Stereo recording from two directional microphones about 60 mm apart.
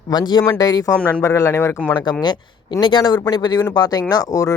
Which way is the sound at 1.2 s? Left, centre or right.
Left.